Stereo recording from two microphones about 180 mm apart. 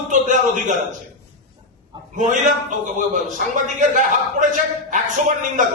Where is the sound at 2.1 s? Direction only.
45° right (ahead or behind).